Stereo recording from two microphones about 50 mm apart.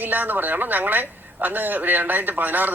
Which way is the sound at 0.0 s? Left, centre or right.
Right.